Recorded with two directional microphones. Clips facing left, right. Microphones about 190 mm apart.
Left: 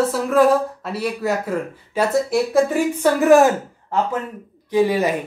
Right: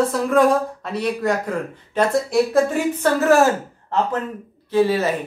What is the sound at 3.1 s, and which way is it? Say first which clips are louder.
A man's voice: left 3 dB; 15° left (ahead or behind).